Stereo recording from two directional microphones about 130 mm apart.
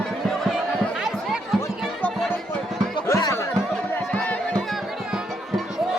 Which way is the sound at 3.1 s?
20° left (ahead or behind).